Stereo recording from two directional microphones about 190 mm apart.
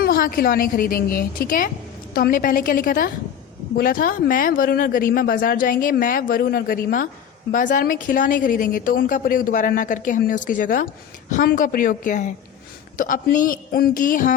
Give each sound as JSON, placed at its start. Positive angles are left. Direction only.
{"t": 0.0, "sound": "a woman's voice", "side_deg": 50}